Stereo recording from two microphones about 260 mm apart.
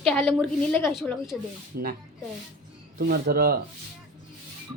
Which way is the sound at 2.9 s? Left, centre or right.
Right.